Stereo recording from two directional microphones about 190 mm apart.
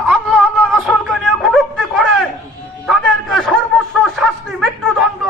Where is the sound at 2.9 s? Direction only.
Centre (ahead or behind).